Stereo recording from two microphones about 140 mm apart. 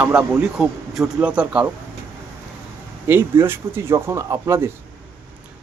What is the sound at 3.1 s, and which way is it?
Speech, 15° right (ahead or behind).